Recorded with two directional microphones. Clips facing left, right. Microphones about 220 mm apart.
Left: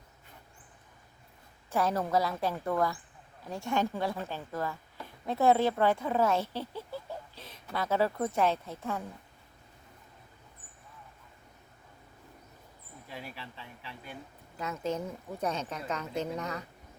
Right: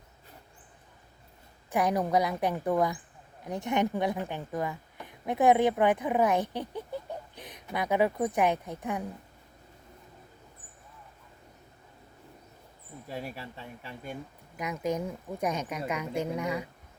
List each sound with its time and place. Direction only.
1.7 s a woman's voice: 15° right (ahead or behind)
13.1 s speech: 40° right (ahead or behind)
14.5 s a woman's voice: 15° right (ahead or behind)